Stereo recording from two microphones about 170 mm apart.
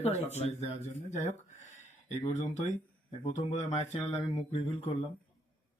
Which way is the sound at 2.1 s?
40° left (ahead or behind).